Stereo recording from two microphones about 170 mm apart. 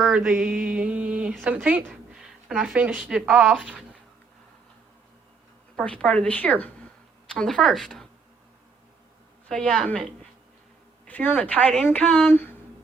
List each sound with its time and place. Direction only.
0.0 s a woman's voice: centre (ahead or behind)
5.7 s a woman's voice: 5° left (ahead or behind)
9.5 s a woman's voice: 5° left (ahead or behind)
11.0 s a woman's voice: 10° left (ahead or behind)